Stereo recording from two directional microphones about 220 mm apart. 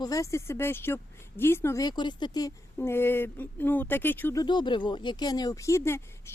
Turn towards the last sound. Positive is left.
turn(degrees=10)  # may be behind; listen again after turning